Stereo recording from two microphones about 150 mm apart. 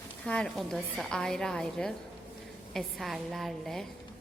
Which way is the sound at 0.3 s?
5° left (ahead or behind).